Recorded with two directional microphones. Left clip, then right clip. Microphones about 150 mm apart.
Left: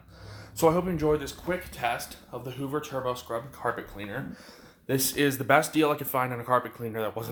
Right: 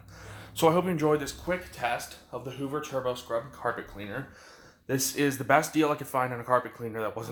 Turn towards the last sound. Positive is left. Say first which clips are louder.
# left 1 dB
turn(degrees=35)  # may be behind; listen again after turning